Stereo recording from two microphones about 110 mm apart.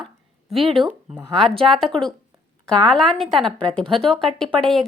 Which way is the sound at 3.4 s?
50° right (ahead or behind).